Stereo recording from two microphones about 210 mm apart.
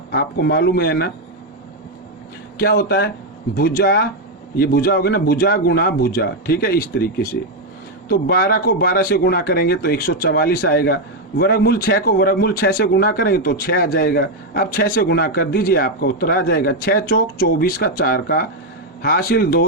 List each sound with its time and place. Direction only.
0.1 s speech: 50° left (ahead or behind)
2.6 s speech: 50° left (ahead or behind)